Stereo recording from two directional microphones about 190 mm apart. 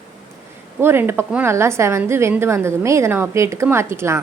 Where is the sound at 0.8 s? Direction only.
10° right (ahead or behind).